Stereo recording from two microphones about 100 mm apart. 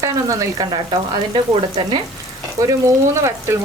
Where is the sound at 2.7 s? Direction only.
30° right (ahead or behind).